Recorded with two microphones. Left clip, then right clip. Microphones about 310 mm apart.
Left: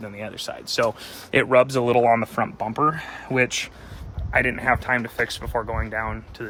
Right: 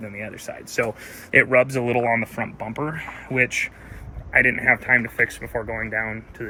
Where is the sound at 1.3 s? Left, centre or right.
Centre.